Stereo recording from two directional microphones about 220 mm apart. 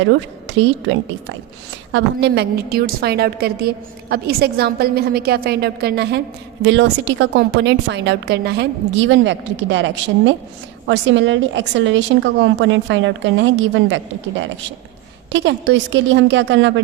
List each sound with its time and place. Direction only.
0.4 s a woman's voice: 55° right (ahead or behind)